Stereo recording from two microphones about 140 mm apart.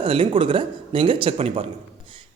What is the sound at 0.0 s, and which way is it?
A man's voice, 40° right (ahead or behind).